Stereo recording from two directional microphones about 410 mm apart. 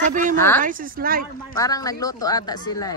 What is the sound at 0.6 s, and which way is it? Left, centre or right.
Speech, centre.